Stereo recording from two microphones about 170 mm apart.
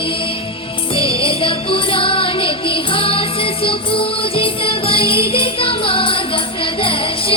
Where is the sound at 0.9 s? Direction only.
30° left (ahead or behind).